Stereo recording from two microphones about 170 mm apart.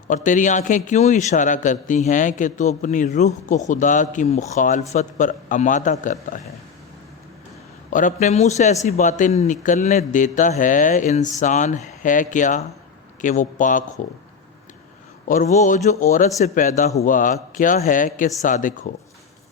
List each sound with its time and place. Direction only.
0.1 s a man's voice: 50° left (ahead or behind)
7.9 s a man's voice: 50° left (ahead or behind)
15.3 s a man's voice: 45° left (ahead or behind)